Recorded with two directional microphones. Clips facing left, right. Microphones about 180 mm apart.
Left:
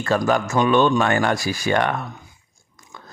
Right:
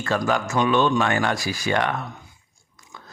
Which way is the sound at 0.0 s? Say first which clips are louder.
Left 3 dB; 40° left (ahead or behind).